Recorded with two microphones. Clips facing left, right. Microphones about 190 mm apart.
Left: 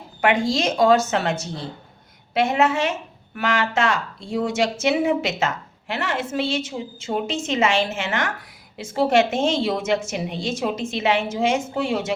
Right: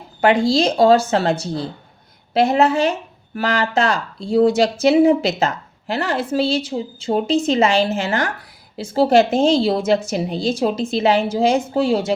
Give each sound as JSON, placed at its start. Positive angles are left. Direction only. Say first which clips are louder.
{"t": 0.2, "sound": "speech", "louder": "right 5 dB", "side_deg": -35}